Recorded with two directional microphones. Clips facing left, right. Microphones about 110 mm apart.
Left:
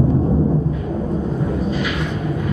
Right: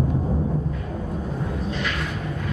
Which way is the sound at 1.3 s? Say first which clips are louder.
Left 7 dB; 5° left (ahead or behind).